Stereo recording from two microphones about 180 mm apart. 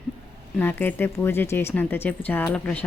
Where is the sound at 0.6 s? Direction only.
10° left (ahead or behind).